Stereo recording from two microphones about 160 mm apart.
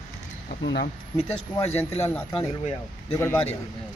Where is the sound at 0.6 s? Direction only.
90° left.